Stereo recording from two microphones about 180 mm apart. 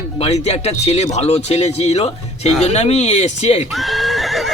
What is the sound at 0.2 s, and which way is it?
Speech, 35° left (ahead or behind).